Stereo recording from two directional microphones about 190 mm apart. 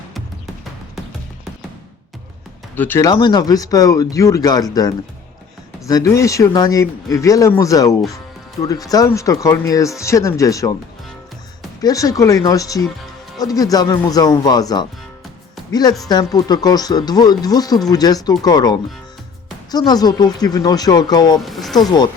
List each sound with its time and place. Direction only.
2.7 s speech: 10° left (ahead or behind)
11.8 s speech: 20° left (ahead or behind)
21.4 s speech: centre (ahead or behind)
21.8 s speech: 20° left (ahead or behind)